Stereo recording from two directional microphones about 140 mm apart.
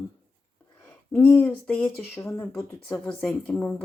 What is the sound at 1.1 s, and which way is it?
A woman's voice, 15° left (ahead or behind).